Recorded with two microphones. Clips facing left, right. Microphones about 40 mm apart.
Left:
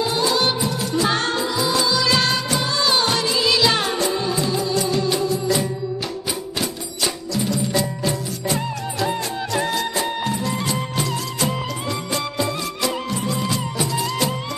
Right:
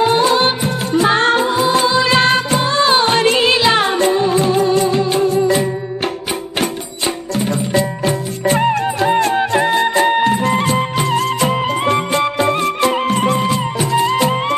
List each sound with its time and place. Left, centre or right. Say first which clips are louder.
0.0 s music: right 7 dB; right
7.3 s music: right 5 dB; right
13.5 s music: right 7 dB; right